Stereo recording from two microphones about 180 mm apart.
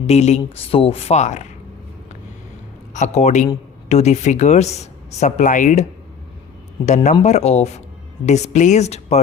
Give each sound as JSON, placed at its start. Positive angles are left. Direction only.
{"t": 0.1, "sound": "speech", "side_deg": 35}
{"t": 2.9, "sound": "speech", "side_deg": 40}
{"t": 6.8, "sound": "speech", "side_deg": 40}